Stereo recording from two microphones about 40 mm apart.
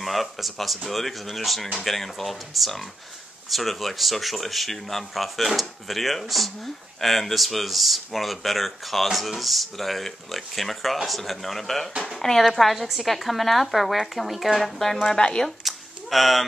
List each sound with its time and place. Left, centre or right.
0.0 s speech: centre
12.5 s speech: centre
15.1 s speech: left
15.4 s a child's voice: centre